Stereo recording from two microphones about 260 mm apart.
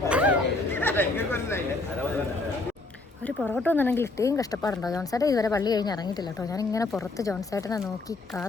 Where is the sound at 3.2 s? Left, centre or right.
Centre.